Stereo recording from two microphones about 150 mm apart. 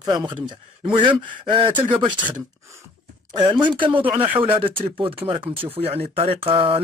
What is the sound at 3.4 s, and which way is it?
Speech, 30° right (ahead or behind).